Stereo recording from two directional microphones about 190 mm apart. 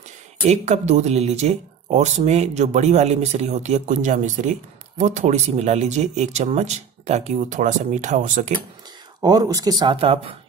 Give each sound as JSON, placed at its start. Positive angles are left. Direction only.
{"t": 0.5, "sound": "speech", "side_deg": -35}
{"t": 9.2, "sound": "speech", "side_deg": -20}